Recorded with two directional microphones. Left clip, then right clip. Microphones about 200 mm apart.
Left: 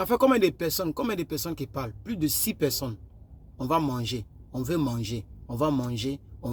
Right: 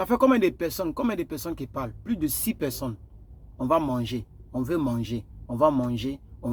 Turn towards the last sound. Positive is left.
turn(degrees=5)  # may be behind; listen again after turning